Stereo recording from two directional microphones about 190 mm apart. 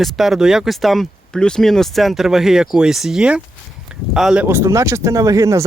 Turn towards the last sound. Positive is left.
turn(degrees=-15)  # may be behind; listen again after turning